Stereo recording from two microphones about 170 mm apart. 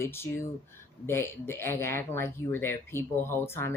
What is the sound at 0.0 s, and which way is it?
Speech, 15° left (ahead or behind).